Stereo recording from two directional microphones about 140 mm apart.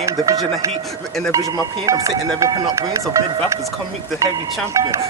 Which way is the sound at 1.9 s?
20° right (ahead or behind).